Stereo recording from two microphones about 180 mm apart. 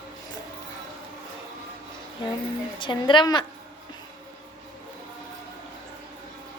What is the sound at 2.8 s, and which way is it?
Speech, 25° left (ahead or behind).